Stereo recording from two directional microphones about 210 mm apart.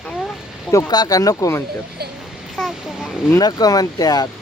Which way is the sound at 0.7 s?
15° left (ahead or behind).